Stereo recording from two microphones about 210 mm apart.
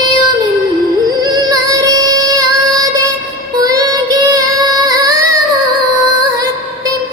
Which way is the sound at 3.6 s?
15° right (ahead or behind).